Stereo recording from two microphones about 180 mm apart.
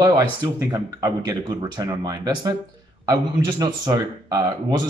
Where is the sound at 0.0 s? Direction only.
20° right (ahead or behind).